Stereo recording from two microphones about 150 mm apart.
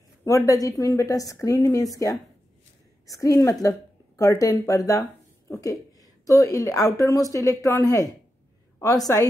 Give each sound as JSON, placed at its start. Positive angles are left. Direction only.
{"t": 0.2, "sound": "a woman's voice", "side_deg": 20}